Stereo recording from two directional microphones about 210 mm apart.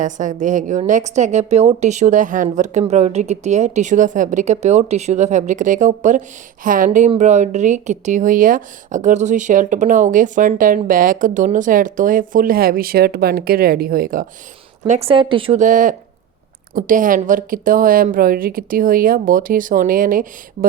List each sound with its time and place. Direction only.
0.0 s speech: 35° right (ahead or behind)
14.8 s speech: 30° right (ahead or behind)
15.6 s speech: 40° right (ahead or behind)